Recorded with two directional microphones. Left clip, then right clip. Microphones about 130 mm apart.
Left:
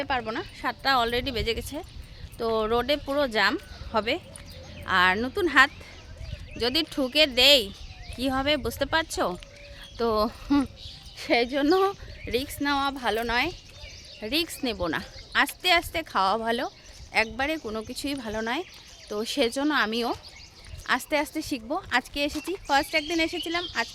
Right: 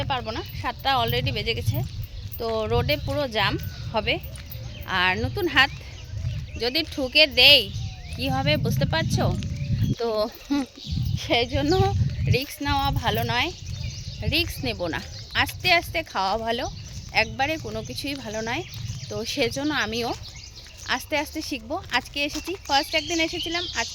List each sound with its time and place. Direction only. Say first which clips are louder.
0.0 s a woman's voice: even; 35° left (ahead or behind)